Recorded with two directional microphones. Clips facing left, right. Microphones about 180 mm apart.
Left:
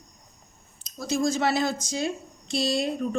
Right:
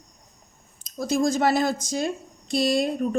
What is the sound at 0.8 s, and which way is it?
A woman's voice, 50° right (ahead or behind).